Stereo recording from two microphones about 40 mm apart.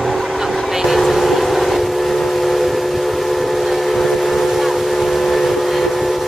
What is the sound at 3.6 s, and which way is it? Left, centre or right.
Steam whistle, centre.